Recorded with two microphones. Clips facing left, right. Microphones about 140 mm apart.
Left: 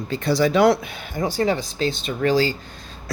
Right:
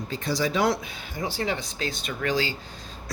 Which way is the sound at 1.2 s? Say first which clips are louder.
Left 7 dB; 40° left (ahead or behind).